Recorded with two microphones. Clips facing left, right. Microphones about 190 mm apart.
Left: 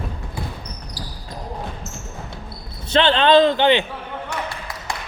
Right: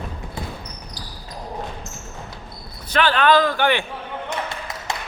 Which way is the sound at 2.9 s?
25° left (ahead or behind).